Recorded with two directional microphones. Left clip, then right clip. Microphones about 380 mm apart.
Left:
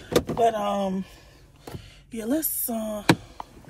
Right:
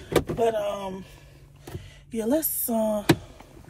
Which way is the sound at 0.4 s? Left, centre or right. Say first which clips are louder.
Left 2 dB; centre.